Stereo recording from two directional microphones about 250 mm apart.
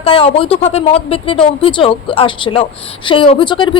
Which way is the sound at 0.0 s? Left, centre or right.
Left.